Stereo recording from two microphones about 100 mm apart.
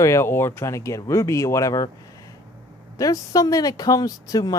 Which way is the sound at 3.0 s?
35° left (ahead or behind).